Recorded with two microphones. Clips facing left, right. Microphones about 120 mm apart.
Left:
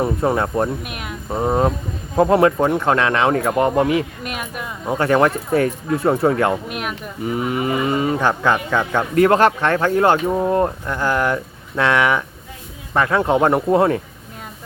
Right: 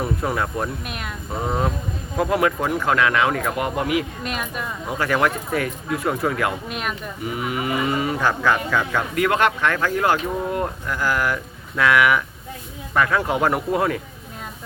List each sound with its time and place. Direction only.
0.0 s speech: 30° left (ahead or behind)
0.9 s a sound: 10° left (ahead or behind)
2.1 s speech: 30° left (ahead or behind)